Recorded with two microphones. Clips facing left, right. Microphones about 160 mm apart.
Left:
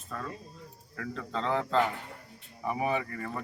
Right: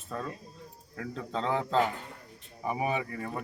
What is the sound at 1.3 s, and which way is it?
A man's voice, 5° right (ahead or behind).